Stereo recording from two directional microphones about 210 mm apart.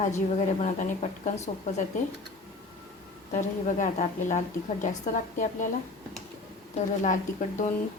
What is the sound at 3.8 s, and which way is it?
A woman's voice, 35° left (ahead or behind).